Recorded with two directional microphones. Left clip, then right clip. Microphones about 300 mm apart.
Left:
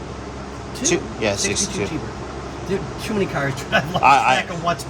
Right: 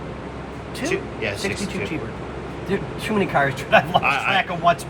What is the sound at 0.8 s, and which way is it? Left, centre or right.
A man's voice, centre.